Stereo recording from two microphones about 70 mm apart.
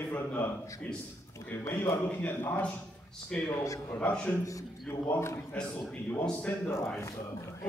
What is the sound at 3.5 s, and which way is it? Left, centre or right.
Speech, left.